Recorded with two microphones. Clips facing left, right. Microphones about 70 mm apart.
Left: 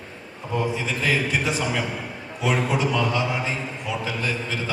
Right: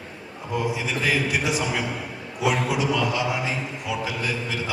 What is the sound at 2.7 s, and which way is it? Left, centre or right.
Speech, left.